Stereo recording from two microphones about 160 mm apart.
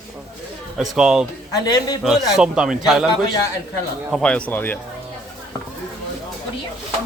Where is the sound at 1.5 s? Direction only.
25° left (ahead or behind).